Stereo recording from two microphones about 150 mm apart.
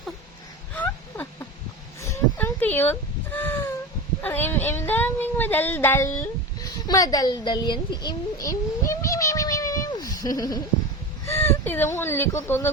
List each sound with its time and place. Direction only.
0.7 s a sound: 10° left (ahead or behind)
2.0 s chicken: 15° left (ahead or behind)
4.2 s speech: 15° left (ahead or behind)